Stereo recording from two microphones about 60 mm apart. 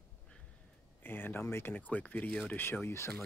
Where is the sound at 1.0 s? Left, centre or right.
Left.